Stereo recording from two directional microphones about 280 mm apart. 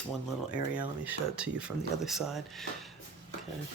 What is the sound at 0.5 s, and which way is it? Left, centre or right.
Speech, centre.